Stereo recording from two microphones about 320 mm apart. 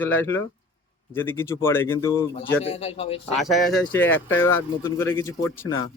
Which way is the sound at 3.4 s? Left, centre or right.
Centre.